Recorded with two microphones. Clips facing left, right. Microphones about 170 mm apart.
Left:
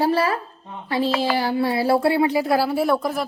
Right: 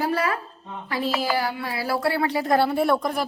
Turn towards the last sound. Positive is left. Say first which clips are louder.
# left 1 dB
turn(degrees=5)  # may be behind; listen again after turning